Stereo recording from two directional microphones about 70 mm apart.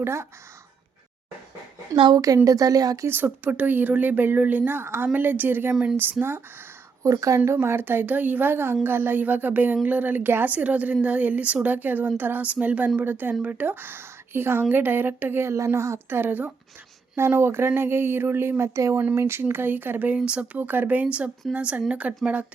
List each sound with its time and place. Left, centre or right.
0.0 s speech: right
2.0 s speech: right
3.1 s speech: right
7.0 s speech: right
19.1 s speech: right
20.1 s speech: centre